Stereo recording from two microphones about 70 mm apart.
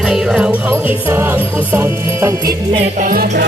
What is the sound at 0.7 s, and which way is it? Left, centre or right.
Music, right.